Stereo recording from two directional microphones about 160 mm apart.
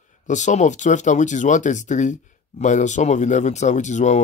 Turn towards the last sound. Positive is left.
turn(degrees=50)  # may be behind; listen again after turning